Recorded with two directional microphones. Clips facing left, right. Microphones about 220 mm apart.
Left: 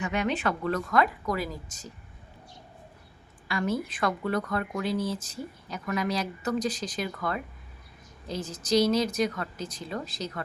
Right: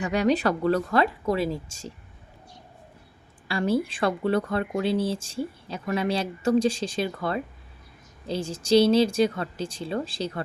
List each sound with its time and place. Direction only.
0.0 s speech: 35° right (ahead or behind)
3.5 s speech: 30° right (ahead or behind)